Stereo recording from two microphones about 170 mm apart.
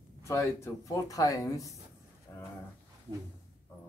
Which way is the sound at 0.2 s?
15° left (ahead or behind).